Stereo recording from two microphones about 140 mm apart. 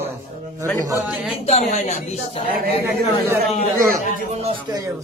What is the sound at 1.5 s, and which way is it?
Speech, 55° left (ahead or behind).